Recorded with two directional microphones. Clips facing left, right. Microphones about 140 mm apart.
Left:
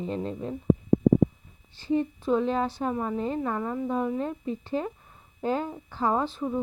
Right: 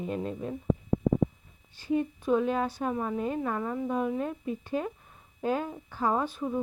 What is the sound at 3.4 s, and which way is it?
Speech, 10° left (ahead or behind).